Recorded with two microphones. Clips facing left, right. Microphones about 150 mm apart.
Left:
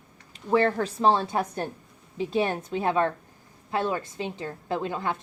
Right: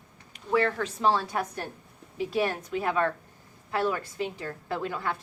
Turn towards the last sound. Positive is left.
turn(degrees=25)  # may be behind; listen again after turning